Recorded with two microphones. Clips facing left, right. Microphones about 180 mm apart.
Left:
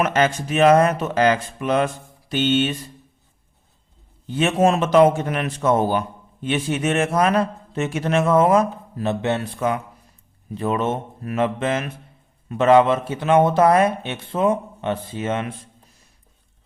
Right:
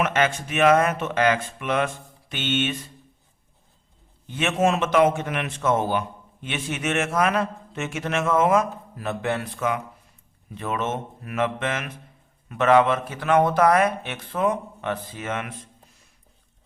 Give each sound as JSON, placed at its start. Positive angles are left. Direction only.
{"t": 0.0, "sound": "a man's voice", "side_deg": 35}
{"t": 4.3, "sound": "a man's voice", "side_deg": 35}